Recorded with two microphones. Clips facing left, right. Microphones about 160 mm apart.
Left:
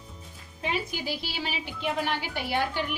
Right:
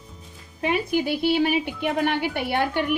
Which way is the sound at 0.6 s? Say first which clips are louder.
Right 8 dB; 55° right (ahead or behind).